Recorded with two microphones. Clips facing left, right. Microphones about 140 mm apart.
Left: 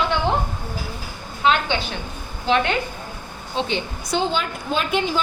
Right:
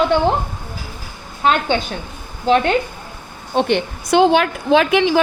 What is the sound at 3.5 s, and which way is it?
Speech, 65° right (ahead or behind).